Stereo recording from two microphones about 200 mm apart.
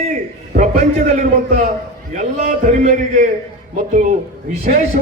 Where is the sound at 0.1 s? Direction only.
40° right (ahead or behind).